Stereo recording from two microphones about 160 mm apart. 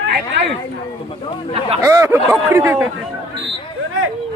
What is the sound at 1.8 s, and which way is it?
A man's voice, 20° right (ahead or behind).